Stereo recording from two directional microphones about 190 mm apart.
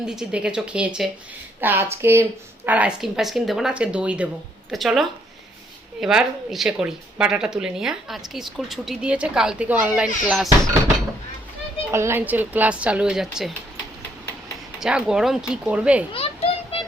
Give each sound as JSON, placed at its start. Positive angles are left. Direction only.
{"t": 0.0, "sound": "a woman's voice", "side_deg": -5}
{"t": 11.9, "sound": "speech", "side_deg": -15}
{"t": 14.8, "sound": "a woman's voice", "side_deg": -5}
{"t": 16.1, "sound": "children playing", "side_deg": 30}